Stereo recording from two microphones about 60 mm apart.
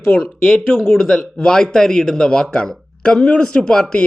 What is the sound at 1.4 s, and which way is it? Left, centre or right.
Speech, centre.